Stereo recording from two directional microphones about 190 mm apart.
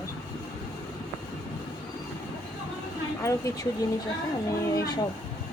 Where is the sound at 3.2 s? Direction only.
15° left (ahead or behind).